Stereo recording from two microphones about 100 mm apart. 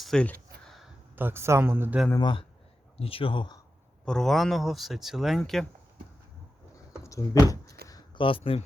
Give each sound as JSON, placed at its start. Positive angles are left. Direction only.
{"t": 0.0, "sound": "speech", "side_deg": 5}
{"t": 1.1, "sound": "speech", "side_deg": -20}
{"t": 2.1, "sound": "speech", "side_deg": 55}
{"t": 3.0, "sound": "speech", "side_deg": 65}
{"t": 4.0, "sound": "speech", "side_deg": 5}
{"t": 7.0, "sound": "a sound", "side_deg": 35}
{"t": 8.1, "sound": "speech", "side_deg": 60}